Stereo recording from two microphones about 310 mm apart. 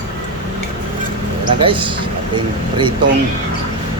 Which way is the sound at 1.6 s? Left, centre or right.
Centre.